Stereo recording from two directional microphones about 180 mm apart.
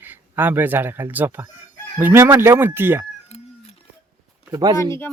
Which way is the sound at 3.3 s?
35° left (ahead or behind).